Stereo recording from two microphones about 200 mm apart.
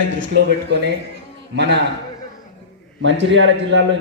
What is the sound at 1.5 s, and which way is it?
Speech, 60° right (ahead or behind).